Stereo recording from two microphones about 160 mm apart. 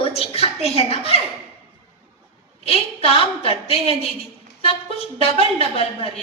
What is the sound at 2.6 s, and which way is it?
A woman's voice, 40° left (ahead or behind).